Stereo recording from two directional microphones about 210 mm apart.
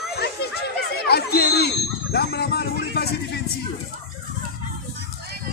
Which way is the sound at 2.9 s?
50° left (ahead or behind).